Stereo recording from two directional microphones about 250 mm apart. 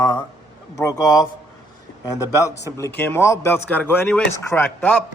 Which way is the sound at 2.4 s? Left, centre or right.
Centre.